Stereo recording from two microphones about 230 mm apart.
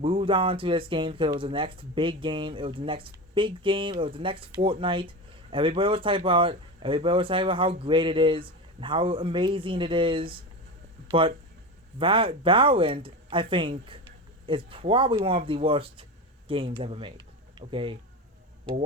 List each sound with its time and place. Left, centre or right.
0.0 s speech: right